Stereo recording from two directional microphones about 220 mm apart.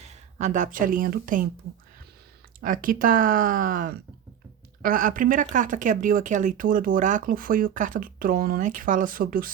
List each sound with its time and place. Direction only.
0.0 s speech: 30° right (ahead or behind)
2.6 s speech: 40° right (ahead or behind)